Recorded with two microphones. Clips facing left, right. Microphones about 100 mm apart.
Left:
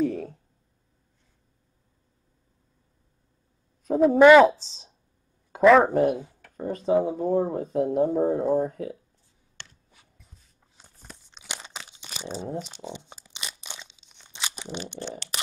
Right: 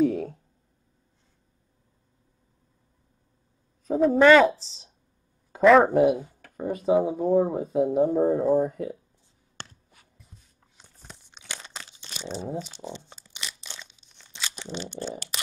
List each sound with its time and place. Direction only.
3.8 s speech: 5° left (ahead or behind)
4.2 s speech: 15° left (ahead or behind)
5.6 s speech: centre (ahead or behind)
11.4 s tearing: 15° left (ahead or behind)